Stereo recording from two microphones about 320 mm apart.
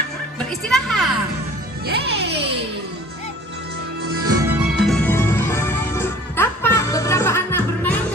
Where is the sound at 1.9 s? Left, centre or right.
Right.